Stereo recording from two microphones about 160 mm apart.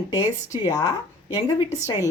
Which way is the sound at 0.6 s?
25° left (ahead or behind).